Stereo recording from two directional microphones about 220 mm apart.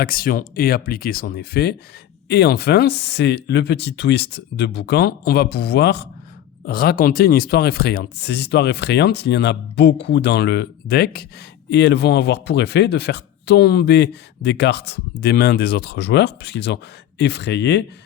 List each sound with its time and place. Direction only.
0.0 s speech: 45° left (ahead or behind)